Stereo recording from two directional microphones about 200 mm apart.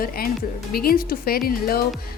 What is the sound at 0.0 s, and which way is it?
A woman's voice, 45° left (ahead or behind).